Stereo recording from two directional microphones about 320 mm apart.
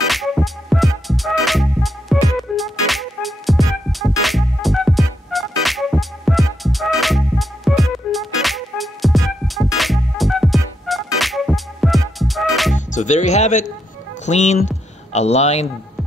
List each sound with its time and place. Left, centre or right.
0.1 s music: centre
12.7 s music: left
14.2 s speech: left